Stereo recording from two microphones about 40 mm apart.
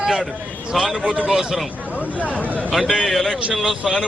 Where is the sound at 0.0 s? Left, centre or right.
Centre.